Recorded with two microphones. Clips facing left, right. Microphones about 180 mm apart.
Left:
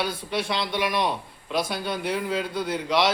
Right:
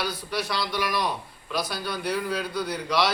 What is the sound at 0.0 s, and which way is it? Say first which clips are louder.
A man's voice: left 2 dB; 25° left (ahead or behind).